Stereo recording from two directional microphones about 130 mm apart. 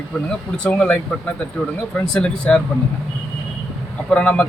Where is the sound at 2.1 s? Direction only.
5° left (ahead or behind).